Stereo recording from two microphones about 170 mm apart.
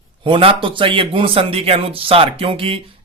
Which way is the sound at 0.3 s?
30° right (ahead or behind).